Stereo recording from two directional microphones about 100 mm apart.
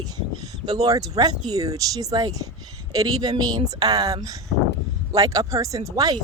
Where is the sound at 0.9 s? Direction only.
35° right (ahead or behind).